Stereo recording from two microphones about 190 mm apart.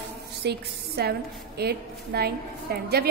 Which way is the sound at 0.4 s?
60° right (ahead or behind).